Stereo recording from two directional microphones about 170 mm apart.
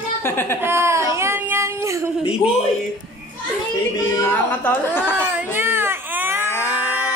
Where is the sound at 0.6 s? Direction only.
15° right (ahead or behind).